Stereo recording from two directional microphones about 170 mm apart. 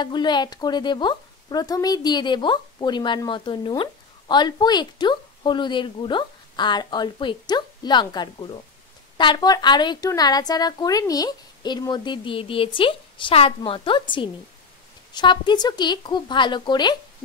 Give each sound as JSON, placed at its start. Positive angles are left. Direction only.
{"t": 0.0, "sound": "a woman's voice", "side_deg": 25}